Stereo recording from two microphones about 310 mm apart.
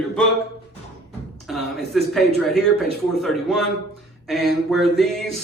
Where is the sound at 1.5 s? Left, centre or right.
Centre.